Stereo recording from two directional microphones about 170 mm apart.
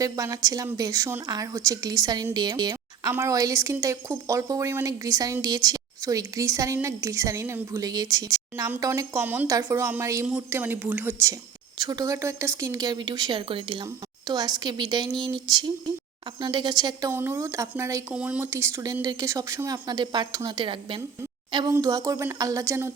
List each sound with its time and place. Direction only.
0.0 s a woman's voice: 20° right (ahead or behind)
17.1 s a woman's voice: 15° right (ahead or behind)
18.1 s a woman's voice: 5° right (ahead or behind)